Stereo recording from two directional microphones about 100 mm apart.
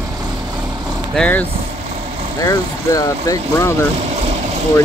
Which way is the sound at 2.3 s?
35° left (ahead or behind).